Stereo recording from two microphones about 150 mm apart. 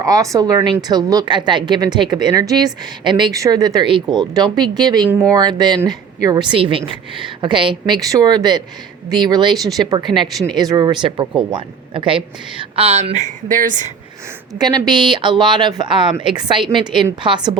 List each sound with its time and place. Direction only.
0.0 s a woman's voice: 20° right (ahead or behind); by 13.2 s 45° right (ahead or behind)
13.5 s speech: 60° right (ahead or behind)
14.6 s speech: 30° right (ahead or behind)